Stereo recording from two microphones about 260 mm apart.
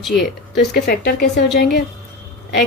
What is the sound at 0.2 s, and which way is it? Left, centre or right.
Speech, left.